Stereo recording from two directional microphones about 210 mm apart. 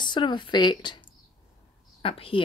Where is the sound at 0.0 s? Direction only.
20° left (ahead or behind).